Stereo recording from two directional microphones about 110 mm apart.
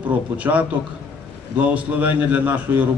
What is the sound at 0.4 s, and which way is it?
A man's voice, 15° right (ahead or behind).